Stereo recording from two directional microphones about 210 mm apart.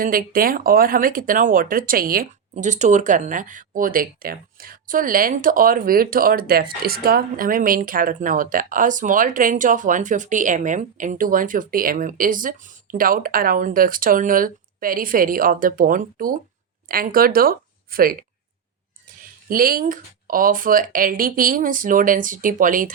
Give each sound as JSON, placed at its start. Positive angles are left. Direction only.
{"t": 0.0, "sound": "speech", "side_deg": -45}
{"t": 19.5, "sound": "speech", "side_deg": -40}